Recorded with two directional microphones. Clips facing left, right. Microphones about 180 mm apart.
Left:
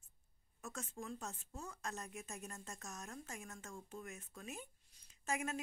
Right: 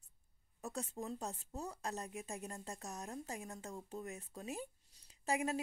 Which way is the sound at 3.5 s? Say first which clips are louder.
Right 4 dB; 35° right (ahead or behind).